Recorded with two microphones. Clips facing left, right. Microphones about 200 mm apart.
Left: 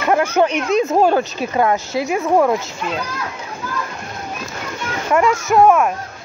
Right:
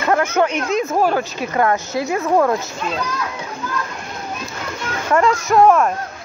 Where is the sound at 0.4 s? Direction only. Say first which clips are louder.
Left 2 dB; 15° left (ahead or behind).